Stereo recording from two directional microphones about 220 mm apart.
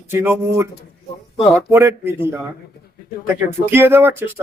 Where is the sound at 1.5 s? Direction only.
10° right (ahead or behind).